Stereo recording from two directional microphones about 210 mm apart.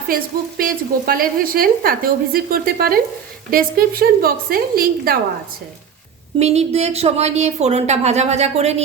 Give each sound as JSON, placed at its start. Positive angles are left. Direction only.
{"t": 0.1, "sound": "a woman's voice", "side_deg": -45}
{"t": 6.4, "sound": "speech", "side_deg": -30}